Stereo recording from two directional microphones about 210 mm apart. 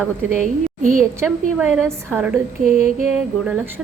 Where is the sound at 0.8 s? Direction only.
40° right (ahead or behind).